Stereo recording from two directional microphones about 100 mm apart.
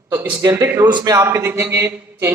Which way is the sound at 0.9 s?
50° right (ahead or behind).